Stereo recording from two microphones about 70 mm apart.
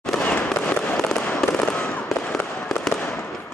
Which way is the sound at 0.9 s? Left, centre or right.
Centre.